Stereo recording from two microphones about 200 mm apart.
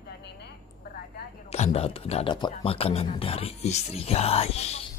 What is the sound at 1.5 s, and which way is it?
Speech, 30° left (ahead or behind).